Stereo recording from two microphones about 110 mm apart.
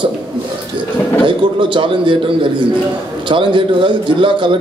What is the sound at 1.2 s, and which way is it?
A man's voice, 50° right (ahead or behind).